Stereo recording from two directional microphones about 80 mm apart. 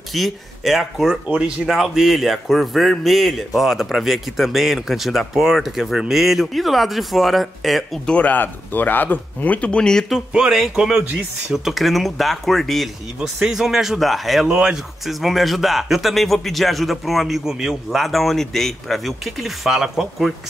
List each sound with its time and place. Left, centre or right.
0.1 s speech: centre
8.1 s speech: centre
10.3 s speech: centre